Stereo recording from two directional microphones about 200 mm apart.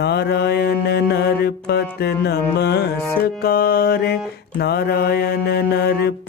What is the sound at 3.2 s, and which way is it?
Mantra, 50° left (ahead or behind).